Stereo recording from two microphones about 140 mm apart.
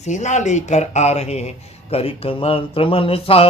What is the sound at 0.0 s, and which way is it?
A man's voice, 55° left (ahead or behind).